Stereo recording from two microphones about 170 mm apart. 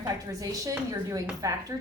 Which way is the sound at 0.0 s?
20° right (ahead or behind).